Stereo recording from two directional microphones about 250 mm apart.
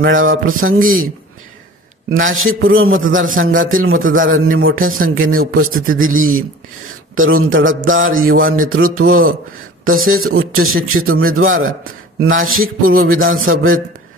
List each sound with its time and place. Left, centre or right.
0.0 s a man's voice: right
2.1 s a man's voice: right